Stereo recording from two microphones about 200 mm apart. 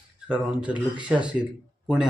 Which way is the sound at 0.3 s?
5° right (ahead or behind).